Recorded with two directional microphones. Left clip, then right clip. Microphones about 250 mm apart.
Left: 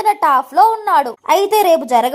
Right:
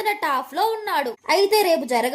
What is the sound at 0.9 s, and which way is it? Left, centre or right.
A woman's voice, left.